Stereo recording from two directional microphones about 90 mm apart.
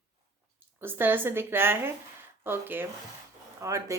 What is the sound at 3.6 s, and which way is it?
Speech, 35° right (ahead or behind).